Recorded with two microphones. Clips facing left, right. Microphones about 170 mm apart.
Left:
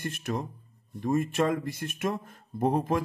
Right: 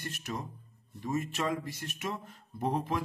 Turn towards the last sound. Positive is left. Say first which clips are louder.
# left 6 dB
turn(degrees=50)  # may be behind; listen again after turning